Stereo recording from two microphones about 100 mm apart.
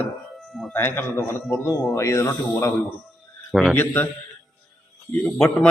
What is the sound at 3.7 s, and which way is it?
Speech, 20° left (ahead or behind).